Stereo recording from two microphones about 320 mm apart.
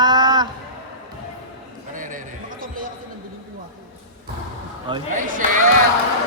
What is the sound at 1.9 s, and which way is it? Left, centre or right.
Basketball bounce, right.